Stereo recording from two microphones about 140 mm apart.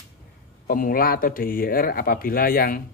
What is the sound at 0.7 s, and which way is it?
Speech, 85° left.